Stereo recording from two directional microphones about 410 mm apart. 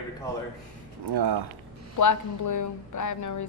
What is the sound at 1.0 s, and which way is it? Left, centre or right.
Speech, right.